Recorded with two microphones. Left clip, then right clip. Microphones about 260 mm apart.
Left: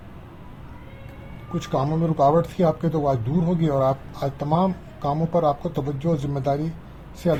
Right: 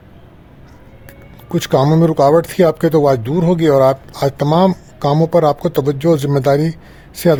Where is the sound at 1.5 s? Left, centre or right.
Right.